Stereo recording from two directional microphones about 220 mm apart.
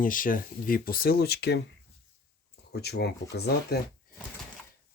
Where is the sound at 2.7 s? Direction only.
45° left (ahead or behind).